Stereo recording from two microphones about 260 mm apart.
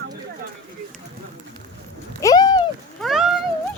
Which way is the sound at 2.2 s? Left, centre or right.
Centre.